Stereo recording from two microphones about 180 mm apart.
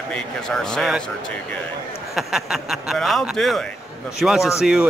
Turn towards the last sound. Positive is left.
turn(degrees=-5)  # may be behind; listen again after turning